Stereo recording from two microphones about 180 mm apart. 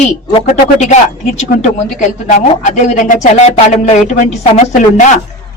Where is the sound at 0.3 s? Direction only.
35° left (ahead or behind).